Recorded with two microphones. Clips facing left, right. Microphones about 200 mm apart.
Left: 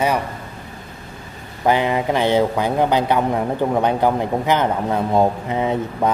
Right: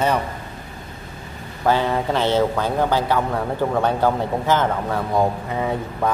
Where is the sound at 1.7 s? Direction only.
15° left (ahead or behind).